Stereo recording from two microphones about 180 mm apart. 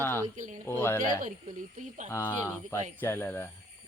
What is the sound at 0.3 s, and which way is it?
Speech, 45° right (ahead or behind).